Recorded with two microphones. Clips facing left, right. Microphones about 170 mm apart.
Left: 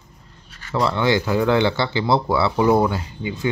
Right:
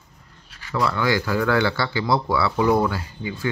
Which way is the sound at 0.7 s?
25° left (ahead or behind).